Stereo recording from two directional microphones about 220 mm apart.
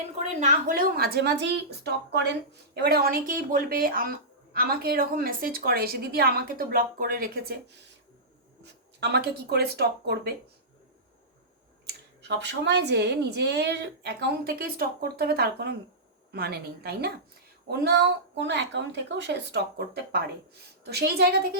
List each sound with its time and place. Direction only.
0.2 s a woman's voice: 30° right (ahead or behind)
8.6 s a woman's voice: 50° right (ahead or behind)
12.4 s a woman's voice: 50° right (ahead or behind)